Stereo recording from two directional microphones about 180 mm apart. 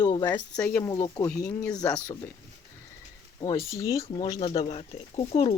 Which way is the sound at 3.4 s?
20° left (ahead or behind).